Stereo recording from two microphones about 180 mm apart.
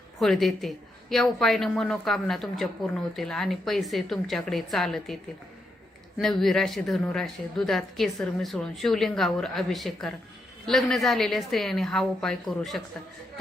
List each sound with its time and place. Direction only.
0.2 s a woman's voice: centre (ahead or behind)
6.1 s a woman's voice: centre (ahead or behind)